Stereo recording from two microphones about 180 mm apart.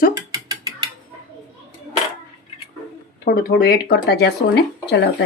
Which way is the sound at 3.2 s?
55° left (ahead or behind).